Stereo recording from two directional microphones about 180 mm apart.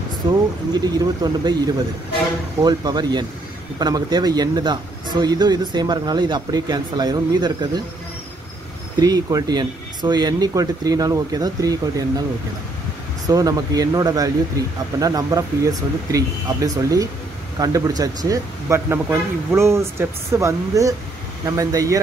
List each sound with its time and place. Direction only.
0.2 s speech: 20° right (ahead or behind)
2.6 s speech: 25° right (ahead or behind)
9.0 s speech: 20° right (ahead or behind)
13.3 s speech: 20° right (ahead or behind)